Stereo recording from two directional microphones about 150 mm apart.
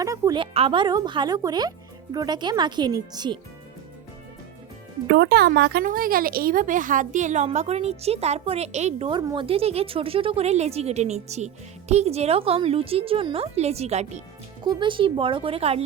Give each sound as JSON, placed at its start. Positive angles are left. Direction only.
{"t": 0.0, "sound": "speech", "side_deg": -20}
{"t": 0.3, "sound": "speech", "side_deg": -35}
{"t": 5.3, "sound": "speech", "side_deg": -90}
{"t": 9.0, "sound": "a woman's voice", "side_deg": -30}
{"t": 14.6, "sound": "a woman's voice", "side_deg": -30}